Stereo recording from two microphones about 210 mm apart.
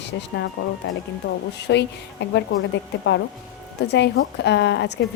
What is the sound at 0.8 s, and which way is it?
A woman's voice, 55° left (ahead or behind).